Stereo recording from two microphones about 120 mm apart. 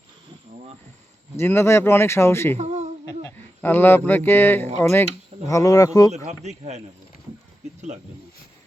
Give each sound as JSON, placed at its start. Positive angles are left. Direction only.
{"t": 1.4, "sound": "speech", "side_deg": 20}
{"t": 2.6, "sound": "speech", "side_deg": -70}
{"t": 3.2, "sound": "speech", "side_deg": 15}
{"t": 6.1, "sound": "speech", "side_deg": -70}